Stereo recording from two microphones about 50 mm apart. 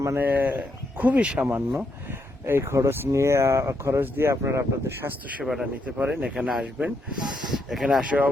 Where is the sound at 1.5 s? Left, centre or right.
Right.